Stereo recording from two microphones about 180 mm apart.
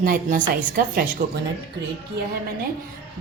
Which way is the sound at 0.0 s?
50° right (ahead or behind).